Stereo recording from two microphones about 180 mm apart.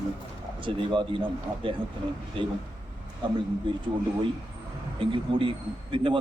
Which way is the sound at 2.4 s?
30° right (ahead or behind).